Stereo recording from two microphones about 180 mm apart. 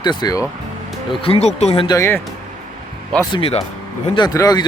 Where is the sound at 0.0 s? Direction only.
25° left (ahead or behind).